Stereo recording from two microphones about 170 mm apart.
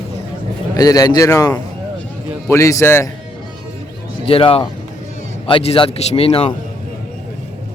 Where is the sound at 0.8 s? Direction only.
20° left (ahead or behind).